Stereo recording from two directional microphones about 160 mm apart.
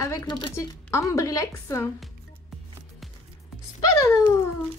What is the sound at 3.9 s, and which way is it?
Speech, 15° left (ahead or behind).